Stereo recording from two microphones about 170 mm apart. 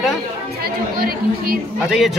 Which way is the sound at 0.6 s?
60° right (ahead or behind).